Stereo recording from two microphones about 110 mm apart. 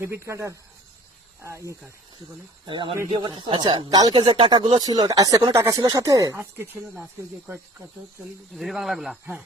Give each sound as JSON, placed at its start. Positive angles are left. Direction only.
{"t": 0.0, "sound": "speech", "side_deg": -25}
{"t": 2.6, "sound": "speech", "side_deg": -45}
{"t": 8.5, "sound": "speech", "side_deg": 0}